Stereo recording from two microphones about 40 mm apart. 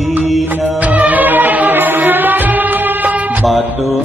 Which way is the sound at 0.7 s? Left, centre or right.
Right.